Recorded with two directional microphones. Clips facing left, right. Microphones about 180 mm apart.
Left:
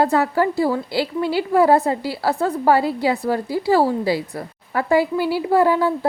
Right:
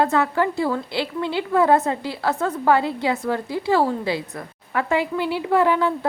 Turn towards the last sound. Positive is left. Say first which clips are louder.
# left 2 dB
turn(degrees=35)  # may be behind; listen again after turning